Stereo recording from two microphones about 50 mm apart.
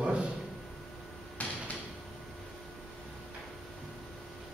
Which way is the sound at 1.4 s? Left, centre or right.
Left.